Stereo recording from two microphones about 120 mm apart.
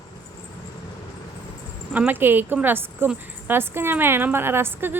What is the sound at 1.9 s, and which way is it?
A woman's voice, 15° right (ahead or behind).